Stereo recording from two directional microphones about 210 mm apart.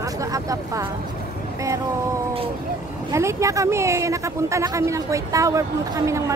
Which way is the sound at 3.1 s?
15° right (ahead or behind).